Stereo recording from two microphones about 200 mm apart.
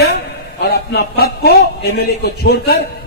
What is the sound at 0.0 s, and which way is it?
A man's voice, 50° left (ahead or behind).